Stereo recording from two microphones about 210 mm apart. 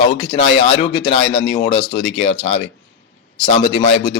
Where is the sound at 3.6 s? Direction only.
65° left (ahead or behind).